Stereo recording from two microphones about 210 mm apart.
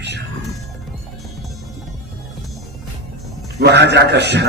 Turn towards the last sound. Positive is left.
turn(degrees=-55)  # may be behind; listen again after turning